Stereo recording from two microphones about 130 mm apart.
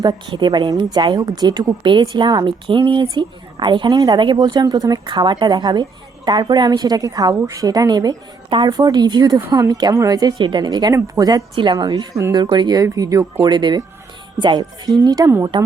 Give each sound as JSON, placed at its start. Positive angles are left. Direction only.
{"t": 0.0, "sound": "a woman's voice", "side_deg": -35}